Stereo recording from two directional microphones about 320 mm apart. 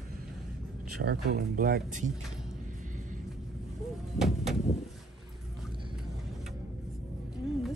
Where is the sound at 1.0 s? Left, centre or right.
Right.